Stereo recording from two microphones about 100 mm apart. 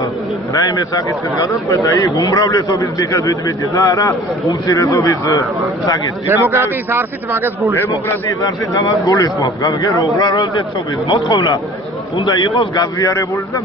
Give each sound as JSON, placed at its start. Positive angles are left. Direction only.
{"t": 0.7, "sound": "a man's voice", "side_deg": 35}
{"t": 6.2, "sound": "a man's voice", "side_deg": -20}
{"t": 8.3, "sound": "a man's voice", "side_deg": 35}